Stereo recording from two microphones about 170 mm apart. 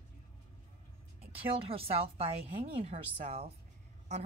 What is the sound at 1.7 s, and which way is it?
A woman's voice, 35° right (ahead or behind).